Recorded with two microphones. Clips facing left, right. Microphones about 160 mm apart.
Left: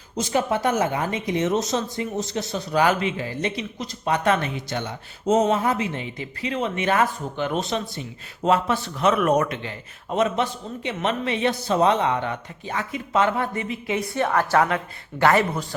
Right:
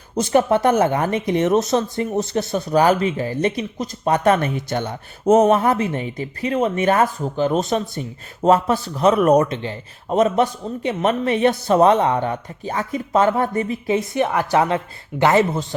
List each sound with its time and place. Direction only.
0.2 s speech: 55° right (ahead or behind)
2.8 s speech: 40° right (ahead or behind)
14.1 s a woman's voice: 15° right (ahead or behind)